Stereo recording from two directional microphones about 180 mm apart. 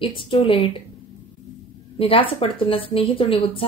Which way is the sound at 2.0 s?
30° left (ahead or behind).